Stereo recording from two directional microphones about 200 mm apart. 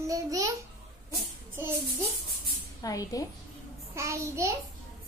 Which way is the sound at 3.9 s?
15° right (ahead or behind).